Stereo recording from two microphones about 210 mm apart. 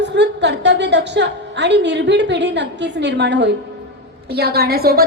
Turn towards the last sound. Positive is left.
turn(degrees=-45)  # may be behind; listen again after turning